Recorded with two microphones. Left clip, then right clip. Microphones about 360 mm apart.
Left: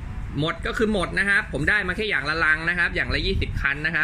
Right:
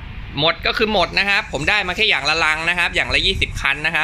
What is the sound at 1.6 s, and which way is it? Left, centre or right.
Speech, centre.